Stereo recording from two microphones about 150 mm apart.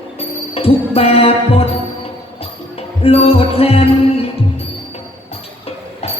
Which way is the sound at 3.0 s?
40° left (ahead or behind).